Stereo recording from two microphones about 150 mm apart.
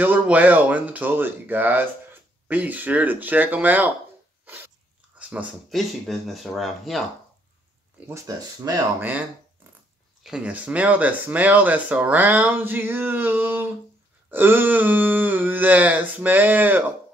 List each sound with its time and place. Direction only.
0.0 s speech: 10° right (ahead or behind)
5.2 s speech: 10° right (ahead or behind)
8.3 s speech: 25° right (ahead or behind)
10.2 s speech: 5° right (ahead or behind)